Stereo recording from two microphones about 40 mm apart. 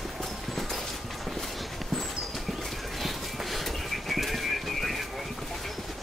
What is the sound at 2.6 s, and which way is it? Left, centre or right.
Bird, centre.